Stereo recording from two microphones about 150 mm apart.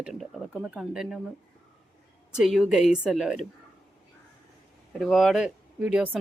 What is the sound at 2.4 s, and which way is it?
Speech, centre (ahead or behind).